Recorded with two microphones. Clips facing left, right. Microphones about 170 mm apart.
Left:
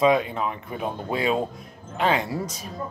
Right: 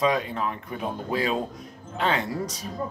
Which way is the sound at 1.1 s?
25° left (ahead or behind).